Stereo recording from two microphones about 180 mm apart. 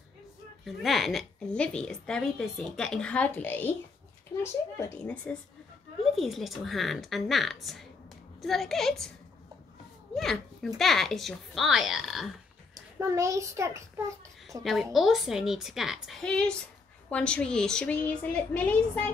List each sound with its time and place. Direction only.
0.7 s a woman's voice: centre (ahead or behind)
10.1 s a woman's voice: centre (ahead or behind)
13.0 s a child's voice: 15° right (ahead or behind)
14.6 s a woman's voice: centre (ahead or behind)